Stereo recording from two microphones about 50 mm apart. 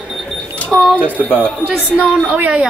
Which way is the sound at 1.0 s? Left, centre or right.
Right.